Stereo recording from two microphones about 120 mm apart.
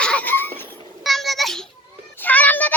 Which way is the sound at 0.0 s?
10° left (ahead or behind).